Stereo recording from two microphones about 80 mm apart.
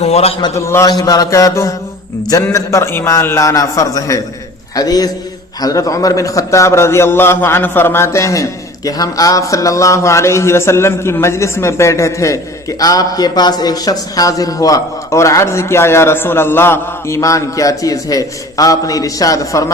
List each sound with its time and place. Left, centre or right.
0.5 s a man's voice: left
0.9 s a man's voice: left
12.8 s a man's voice: left